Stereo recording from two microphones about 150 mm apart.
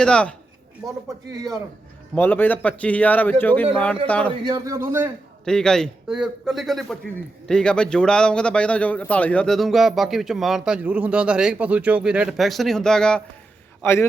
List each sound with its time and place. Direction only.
0.0 s a man's voice: 5° left (ahead or behind)
2.1 s a man's voice: 15° left (ahead or behind)
4.4 s speech: 25° right (ahead or behind)
5.5 s a man's voice: 5° left (ahead or behind)
13.8 s a man's voice: 15° left (ahead or behind)